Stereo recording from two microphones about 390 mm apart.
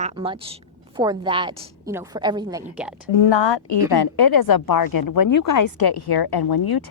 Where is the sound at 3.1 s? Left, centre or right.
Left.